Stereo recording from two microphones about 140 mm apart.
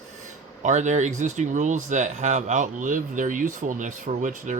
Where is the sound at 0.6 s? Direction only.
55° right (ahead or behind).